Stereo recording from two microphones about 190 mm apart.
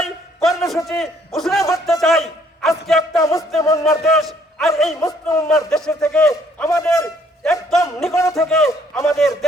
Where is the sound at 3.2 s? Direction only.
15° left (ahead or behind).